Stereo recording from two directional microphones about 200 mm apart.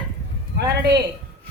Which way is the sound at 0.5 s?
55° right (ahead or behind).